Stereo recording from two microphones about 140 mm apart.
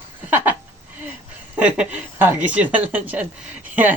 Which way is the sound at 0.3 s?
15° right (ahead or behind).